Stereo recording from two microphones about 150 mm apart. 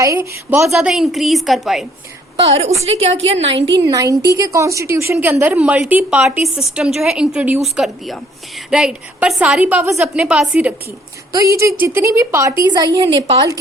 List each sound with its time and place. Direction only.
0.0 s a woman's voice: 20° right (ahead or behind)
0.7 s a woman's voice: 5° right (ahead or behind)
2.3 s a woman's voice: 45° right (ahead or behind)
3.8 s a woman's voice: 25° right (ahead or behind)
11.3 s a woman's voice: 20° right (ahead or behind)